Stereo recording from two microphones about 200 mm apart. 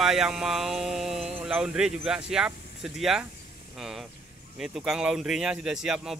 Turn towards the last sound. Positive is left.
turn(degrees=-5)  # may be behind; listen again after turning